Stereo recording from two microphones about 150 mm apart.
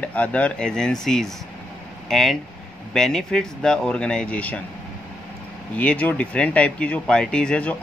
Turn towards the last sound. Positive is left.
turn(degrees=5)  # may be behind; listen again after turning